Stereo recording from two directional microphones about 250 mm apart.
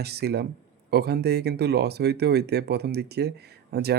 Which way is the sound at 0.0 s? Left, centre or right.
Right.